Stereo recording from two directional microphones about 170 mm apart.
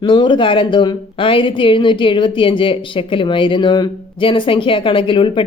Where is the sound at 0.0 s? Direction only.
30° left (ahead or behind).